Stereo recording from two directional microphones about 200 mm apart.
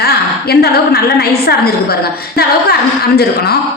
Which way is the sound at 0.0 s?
50° left (ahead or behind).